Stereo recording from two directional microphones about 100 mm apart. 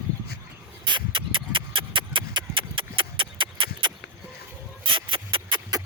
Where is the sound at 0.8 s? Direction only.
50° right (ahead or behind).